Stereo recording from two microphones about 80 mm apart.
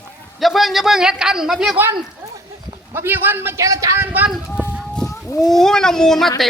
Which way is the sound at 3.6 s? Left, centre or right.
Right.